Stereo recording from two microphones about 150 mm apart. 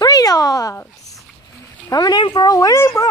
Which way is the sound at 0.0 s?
25° left (ahead or behind).